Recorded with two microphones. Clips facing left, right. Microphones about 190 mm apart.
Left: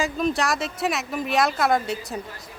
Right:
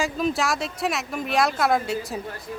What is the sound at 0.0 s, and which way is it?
A woman's voice, centre (ahead or behind).